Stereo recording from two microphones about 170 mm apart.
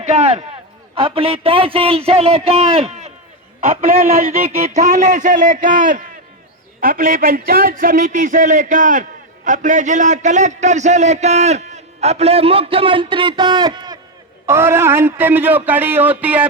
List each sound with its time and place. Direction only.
0.0 s a man's voice: 40° right (ahead or behind)
3.6 s a man's voice: 50° right (ahead or behind); by 16.5 s 10° right (ahead or behind)